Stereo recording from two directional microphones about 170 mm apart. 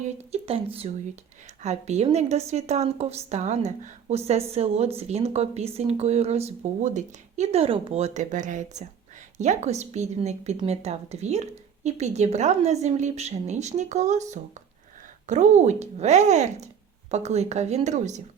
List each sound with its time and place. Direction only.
0.0 s a woman's voice: 40° right (ahead or behind)